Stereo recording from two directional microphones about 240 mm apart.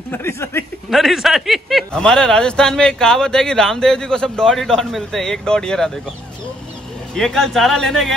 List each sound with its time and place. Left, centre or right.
0.1 s speech: centre
0.8 s speech: centre
7.2 s speech: centre